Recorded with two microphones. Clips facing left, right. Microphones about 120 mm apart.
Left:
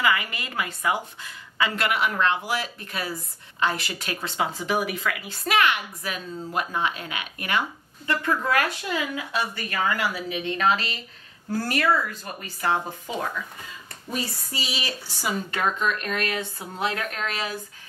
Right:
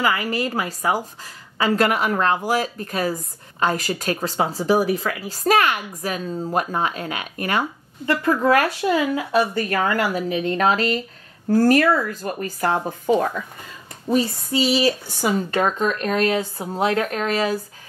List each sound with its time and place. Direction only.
0.0 s a woman's voice: 35° right (ahead or behind)
14.0 s speech: 30° right (ahead or behind)
14.8 s a woman's voice: 45° right (ahead or behind)